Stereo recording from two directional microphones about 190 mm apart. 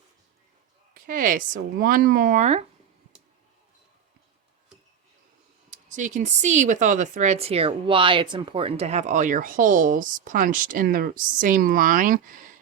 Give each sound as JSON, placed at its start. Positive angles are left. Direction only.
{"t": 0.9, "sound": "a woman's voice", "side_deg": -45}
{"t": 5.7, "sound": "speech", "side_deg": -40}